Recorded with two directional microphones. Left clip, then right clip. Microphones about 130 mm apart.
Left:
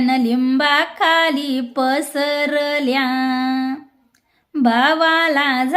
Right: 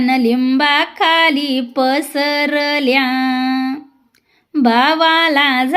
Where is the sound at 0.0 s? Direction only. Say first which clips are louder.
Right 3 dB; 25° right (ahead or behind).